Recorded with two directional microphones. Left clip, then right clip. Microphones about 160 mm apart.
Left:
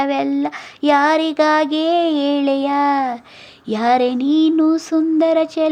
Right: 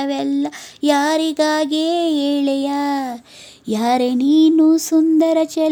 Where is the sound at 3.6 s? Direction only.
55° right (ahead or behind).